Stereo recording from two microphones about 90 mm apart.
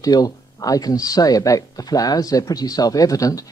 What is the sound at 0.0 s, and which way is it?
Speech, 45° left (ahead or behind).